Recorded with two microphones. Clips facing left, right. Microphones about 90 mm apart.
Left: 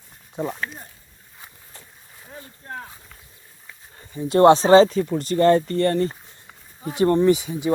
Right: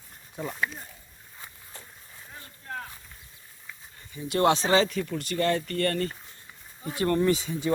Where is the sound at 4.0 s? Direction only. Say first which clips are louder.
Left 9 dB; 35° left (ahead or behind); by 7.7 s 15° left (ahead or behind).